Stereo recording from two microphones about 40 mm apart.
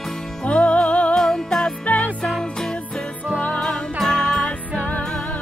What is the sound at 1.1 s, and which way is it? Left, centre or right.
Music, centre.